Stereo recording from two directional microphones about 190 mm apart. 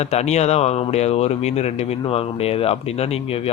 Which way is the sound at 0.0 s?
35° left (ahead or behind).